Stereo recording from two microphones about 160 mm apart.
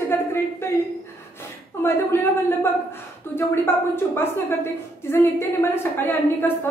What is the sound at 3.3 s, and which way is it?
A woman's voice, 15° left (ahead or behind).